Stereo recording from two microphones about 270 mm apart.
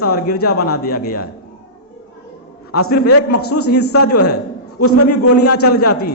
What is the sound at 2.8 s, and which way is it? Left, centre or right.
Speech, left.